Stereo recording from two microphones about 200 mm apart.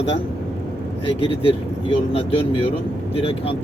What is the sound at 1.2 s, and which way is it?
Speech, 25° left (ahead or behind).